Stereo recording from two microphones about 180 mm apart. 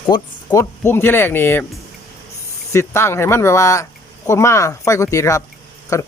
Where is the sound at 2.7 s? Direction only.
15° left (ahead or behind).